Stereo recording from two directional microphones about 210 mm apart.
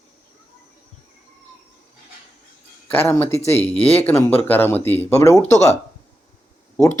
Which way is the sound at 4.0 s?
10° left (ahead or behind).